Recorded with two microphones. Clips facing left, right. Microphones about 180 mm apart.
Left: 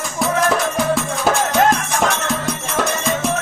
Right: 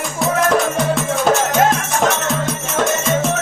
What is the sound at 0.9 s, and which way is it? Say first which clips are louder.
Music: right 2 dB; centre (ahead or behind).